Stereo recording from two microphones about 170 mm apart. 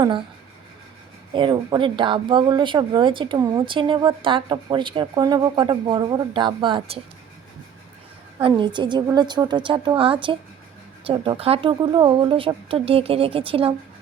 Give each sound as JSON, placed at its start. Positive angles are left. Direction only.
{"t": 1.3, "sound": "speech", "side_deg": -30}
{"t": 8.4, "sound": "speech", "side_deg": -30}